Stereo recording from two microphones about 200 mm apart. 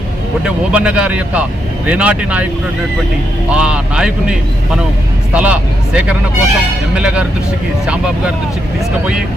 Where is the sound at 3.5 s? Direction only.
5° right (ahead or behind).